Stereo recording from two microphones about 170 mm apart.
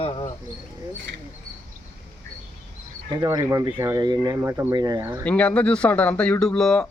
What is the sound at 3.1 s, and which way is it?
Speech, 20° right (ahead or behind).